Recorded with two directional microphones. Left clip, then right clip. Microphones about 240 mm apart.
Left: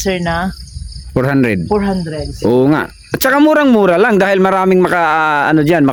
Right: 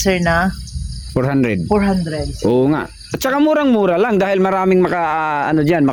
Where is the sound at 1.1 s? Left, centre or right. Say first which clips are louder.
Left 4 dB; centre.